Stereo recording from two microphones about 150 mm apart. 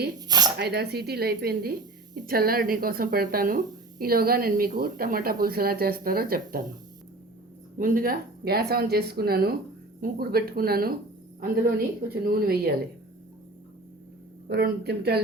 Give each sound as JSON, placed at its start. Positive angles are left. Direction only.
{"t": 0.3, "sound": "a sound", "side_deg": -25}
{"t": 0.6, "sound": "a woman's voice", "side_deg": -90}
{"t": 7.8, "sound": "a woman's voice", "side_deg": -65}
{"t": 14.5, "sound": "speech", "side_deg": -90}